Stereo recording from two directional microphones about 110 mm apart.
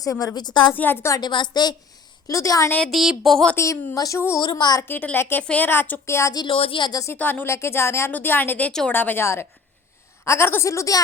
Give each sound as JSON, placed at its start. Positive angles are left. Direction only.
{"t": 0.0, "sound": "a woman's voice", "side_deg": 30}
{"t": 0.7, "sound": "a woman's voice", "side_deg": 20}
{"t": 1.2, "sound": "a woman's voice", "side_deg": 45}
{"t": 2.2, "sound": "a woman's voice", "side_deg": 30}
{"t": 2.7, "sound": "speech", "side_deg": 5}
{"t": 3.5, "sound": "a woman's voice", "side_deg": 25}
{"t": 4.4, "sound": "a woman's voice", "side_deg": 40}
{"t": 4.8, "sound": "a woman's voice", "side_deg": 15}
{"t": 6.3, "sound": "a woman's voice", "side_deg": 40}
{"t": 7.0, "sound": "a woman's voice", "side_deg": 20}